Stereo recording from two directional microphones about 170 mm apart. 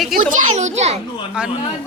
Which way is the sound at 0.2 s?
50° right (ahead or behind).